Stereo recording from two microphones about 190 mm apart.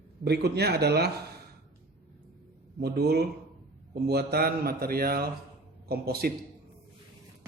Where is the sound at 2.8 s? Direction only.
55° right (ahead or behind).